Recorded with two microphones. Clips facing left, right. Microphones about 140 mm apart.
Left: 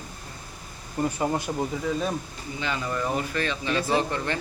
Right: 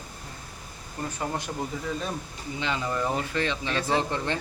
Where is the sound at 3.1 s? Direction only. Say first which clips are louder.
Even; 20° right (ahead or behind).